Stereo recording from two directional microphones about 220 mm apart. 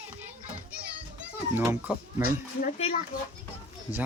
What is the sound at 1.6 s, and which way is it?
Speech, 10° right (ahead or behind).